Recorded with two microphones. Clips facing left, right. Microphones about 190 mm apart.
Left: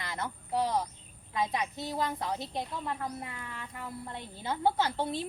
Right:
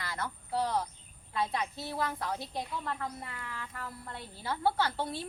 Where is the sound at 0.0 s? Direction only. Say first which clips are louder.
Left 1 dB; 20° left (ahead or behind).